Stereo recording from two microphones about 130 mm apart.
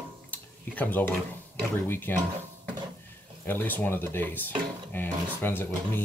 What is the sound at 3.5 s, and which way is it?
Speech, 15° left (ahead or behind).